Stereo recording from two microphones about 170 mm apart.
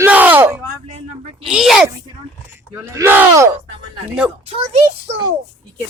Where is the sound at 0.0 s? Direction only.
10° right (ahead or behind).